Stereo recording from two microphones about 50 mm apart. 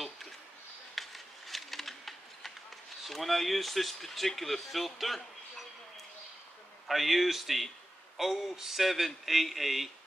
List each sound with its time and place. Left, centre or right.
0.9 s a sound: centre
3.0 s speech: centre
6.9 s speech: centre